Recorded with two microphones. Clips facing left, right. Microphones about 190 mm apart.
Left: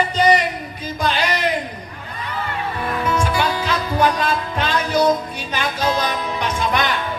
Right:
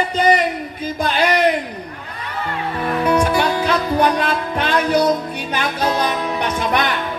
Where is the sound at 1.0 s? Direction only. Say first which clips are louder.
Right 3 dB; 55° right (ahead or behind).